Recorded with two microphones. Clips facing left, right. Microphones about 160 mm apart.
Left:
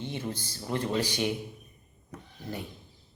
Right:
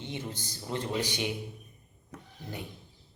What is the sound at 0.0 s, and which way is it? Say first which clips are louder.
Speech: left 3 dB; 20° right (ahead or behind).